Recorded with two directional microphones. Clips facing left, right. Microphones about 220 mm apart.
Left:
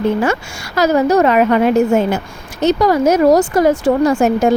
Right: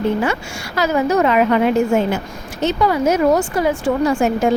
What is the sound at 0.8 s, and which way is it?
Speech, 40° left (ahead or behind).